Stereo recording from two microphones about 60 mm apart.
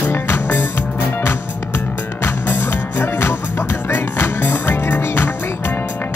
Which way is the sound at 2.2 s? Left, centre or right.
Left.